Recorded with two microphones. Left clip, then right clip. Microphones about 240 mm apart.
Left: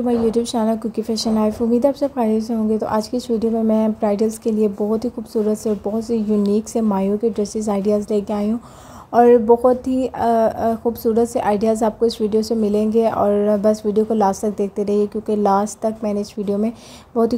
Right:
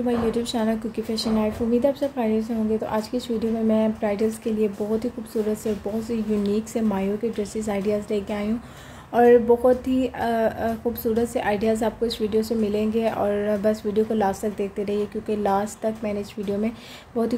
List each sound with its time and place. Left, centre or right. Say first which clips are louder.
0.0 s speech: left 5 dB; left